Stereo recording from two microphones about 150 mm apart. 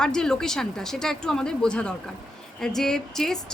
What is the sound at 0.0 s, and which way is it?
Speech, 5° left (ahead or behind).